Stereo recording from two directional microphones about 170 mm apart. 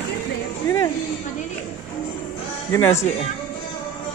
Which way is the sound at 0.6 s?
20° left (ahead or behind).